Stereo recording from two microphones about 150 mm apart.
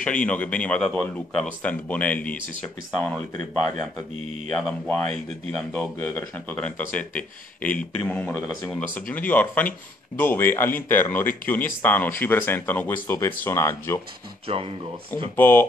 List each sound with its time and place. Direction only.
0.0 s speech: 10° left (ahead or behind)
4.6 s speech: 5° left (ahead or behind)
14.5 s speech: 40° right (ahead or behind)
15.3 s speech: 15° left (ahead or behind)